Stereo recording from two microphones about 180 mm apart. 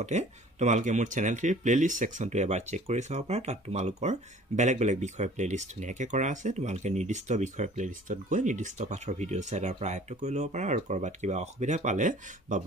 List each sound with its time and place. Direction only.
0.0 s speech: 40° right (ahead or behind)